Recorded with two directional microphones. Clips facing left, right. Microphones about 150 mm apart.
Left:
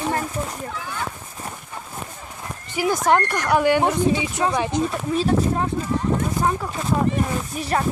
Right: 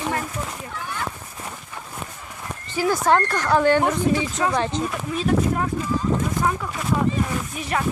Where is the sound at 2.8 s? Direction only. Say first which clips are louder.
Even; 15° left (ahead or behind).